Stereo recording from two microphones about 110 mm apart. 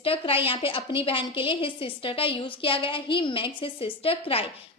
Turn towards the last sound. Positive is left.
turn(degrees=55)  # may be behind; listen again after turning